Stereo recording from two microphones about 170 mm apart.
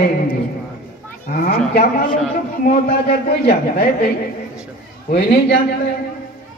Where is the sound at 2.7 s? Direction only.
70° left (ahead or behind).